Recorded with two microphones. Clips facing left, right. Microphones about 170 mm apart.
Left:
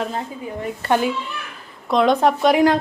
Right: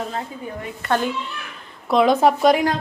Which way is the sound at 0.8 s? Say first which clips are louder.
Left 2 dB; 15° left (ahead or behind).